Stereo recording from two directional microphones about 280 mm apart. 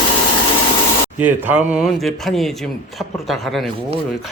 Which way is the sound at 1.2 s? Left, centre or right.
Centre.